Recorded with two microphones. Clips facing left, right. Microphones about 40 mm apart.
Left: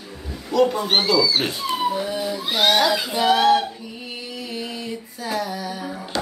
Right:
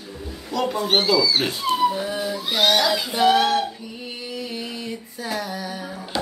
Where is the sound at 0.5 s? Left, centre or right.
Centre.